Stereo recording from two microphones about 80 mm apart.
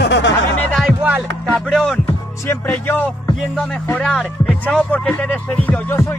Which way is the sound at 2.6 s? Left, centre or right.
Left.